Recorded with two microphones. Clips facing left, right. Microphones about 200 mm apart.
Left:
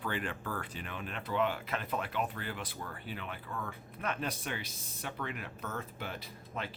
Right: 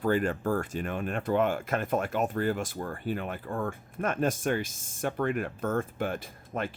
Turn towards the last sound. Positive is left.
turn(degrees=-50)  # may be behind; listen again after turning